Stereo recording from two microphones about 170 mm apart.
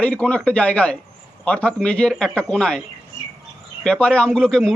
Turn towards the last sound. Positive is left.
turn(degrees=5)  # may be behind; listen again after turning